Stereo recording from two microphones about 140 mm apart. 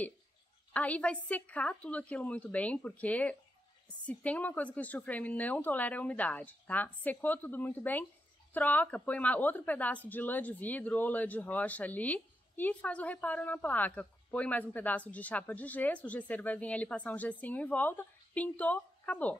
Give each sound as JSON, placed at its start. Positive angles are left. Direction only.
{"t": 0.7, "sound": "speech", "side_deg": 10}